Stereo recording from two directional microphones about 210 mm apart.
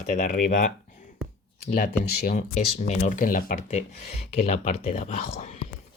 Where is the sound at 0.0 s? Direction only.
35° left (ahead or behind).